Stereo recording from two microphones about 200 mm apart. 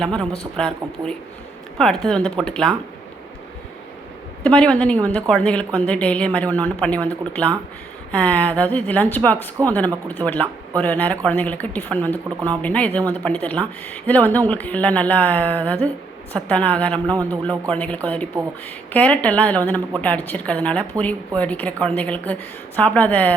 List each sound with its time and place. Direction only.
0.0 s speech: 5° left (ahead or behind)
4.4 s speech: 5° left (ahead or behind)